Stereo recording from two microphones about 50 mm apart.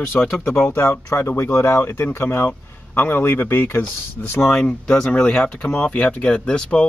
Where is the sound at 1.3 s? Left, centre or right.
Left.